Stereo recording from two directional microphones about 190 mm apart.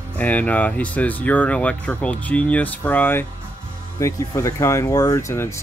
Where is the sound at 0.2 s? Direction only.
10° left (ahead or behind).